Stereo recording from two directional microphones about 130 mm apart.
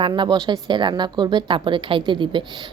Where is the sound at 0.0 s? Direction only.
35° right (ahead or behind).